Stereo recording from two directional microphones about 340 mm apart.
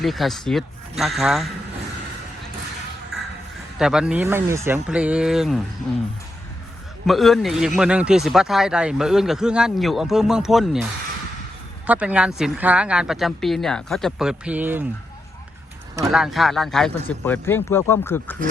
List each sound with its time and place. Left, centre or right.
0.0 s a man's voice: centre
3.1 s music: centre
3.8 s a man's voice: centre
7.1 s a man's voice: centre
11.9 s a man's voice: centre
16.0 s a man's voice: centre